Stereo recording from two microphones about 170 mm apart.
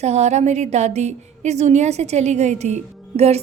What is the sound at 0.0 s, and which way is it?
A woman's voice, 40° right (ahead or behind).